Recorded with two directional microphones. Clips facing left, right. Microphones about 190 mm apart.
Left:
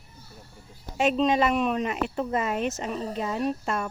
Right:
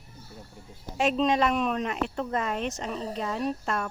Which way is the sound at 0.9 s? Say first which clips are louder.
Left 2 dB; centre (ahead or behind).